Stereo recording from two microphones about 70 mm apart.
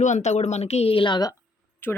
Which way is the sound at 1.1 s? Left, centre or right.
Left.